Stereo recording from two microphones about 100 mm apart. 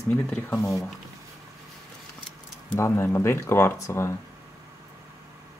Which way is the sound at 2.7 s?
25° left (ahead or behind).